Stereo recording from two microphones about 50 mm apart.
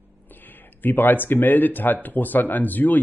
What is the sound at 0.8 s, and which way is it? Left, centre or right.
Speech, left.